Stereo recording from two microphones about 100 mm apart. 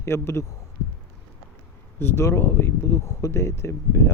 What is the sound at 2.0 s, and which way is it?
Speech, 25° left (ahead or behind).